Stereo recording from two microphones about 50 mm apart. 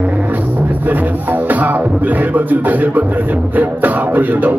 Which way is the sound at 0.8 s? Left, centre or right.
Right.